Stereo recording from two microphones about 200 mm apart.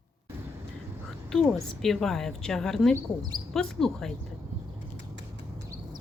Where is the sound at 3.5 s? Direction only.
Centre (ahead or behind).